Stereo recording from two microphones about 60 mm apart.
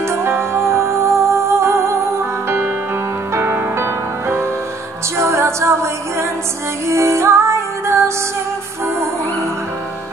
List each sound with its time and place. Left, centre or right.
0.0 s music: right